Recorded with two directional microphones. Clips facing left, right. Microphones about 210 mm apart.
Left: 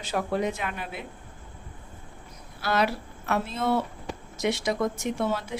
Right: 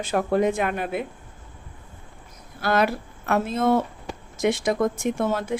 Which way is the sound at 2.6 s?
50° right (ahead or behind).